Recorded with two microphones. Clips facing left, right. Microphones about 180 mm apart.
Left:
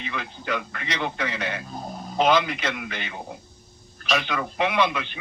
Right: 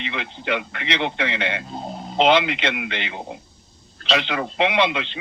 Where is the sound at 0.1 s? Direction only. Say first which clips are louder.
Right 3 dB; 25° right (ahead or behind).